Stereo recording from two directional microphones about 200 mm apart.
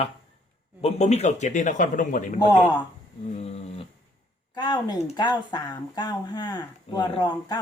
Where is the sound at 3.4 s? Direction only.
30° left (ahead or behind).